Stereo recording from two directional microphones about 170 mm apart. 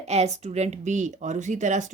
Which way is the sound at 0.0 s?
40° right (ahead or behind).